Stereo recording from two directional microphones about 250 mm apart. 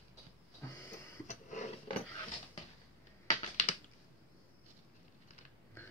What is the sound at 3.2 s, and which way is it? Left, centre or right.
Typing, left.